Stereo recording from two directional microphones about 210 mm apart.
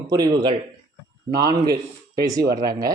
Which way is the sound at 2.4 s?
45° right (ahead or behind).